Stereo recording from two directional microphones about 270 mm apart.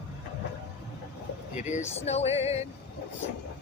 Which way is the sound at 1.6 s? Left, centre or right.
Left.